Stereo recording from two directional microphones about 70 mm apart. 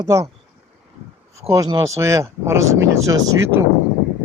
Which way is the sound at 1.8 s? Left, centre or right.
Right.